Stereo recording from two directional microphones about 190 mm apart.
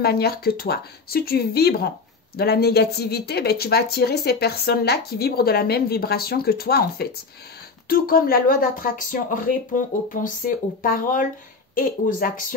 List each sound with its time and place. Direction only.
0.0 s speech: 55° left (ahead or behind)